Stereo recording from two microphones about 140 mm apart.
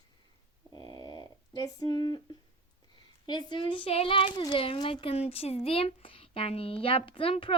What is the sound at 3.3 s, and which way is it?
Speech, 30° left (ahead or behind).